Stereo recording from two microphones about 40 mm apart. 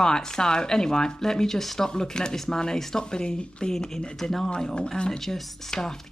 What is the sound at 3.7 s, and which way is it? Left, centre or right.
Speech, centre.